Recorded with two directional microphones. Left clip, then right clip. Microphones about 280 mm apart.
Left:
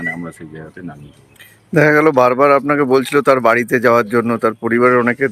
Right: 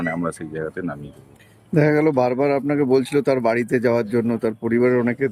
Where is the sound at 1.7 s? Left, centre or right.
Centre.